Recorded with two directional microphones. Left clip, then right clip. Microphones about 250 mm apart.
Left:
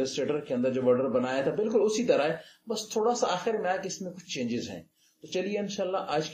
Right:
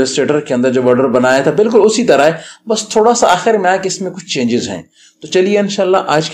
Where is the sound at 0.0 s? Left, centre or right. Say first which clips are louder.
Right 16 dB; right.